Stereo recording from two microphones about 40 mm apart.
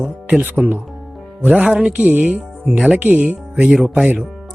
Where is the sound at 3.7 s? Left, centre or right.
Centre.